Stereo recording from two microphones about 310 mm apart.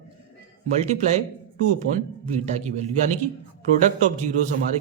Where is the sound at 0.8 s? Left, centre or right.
Right.